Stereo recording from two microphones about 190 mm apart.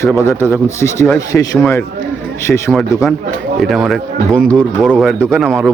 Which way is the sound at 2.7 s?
Centre (ahead or behind).